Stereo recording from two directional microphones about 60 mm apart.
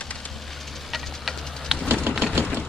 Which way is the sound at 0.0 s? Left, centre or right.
Centre.